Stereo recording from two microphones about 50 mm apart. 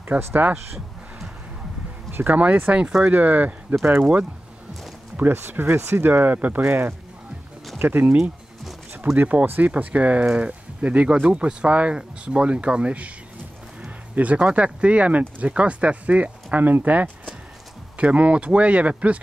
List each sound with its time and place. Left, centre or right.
0.3 s speech: right
2.0 s speech: right
2.4 s speech: right
5.3 s speech: right
9.1 s speech: right
14.1 s speech: right